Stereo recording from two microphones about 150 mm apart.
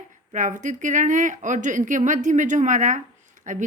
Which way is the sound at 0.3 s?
55° right (ahead or behind).